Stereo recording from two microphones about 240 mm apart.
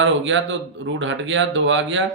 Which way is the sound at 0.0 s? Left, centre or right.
Right.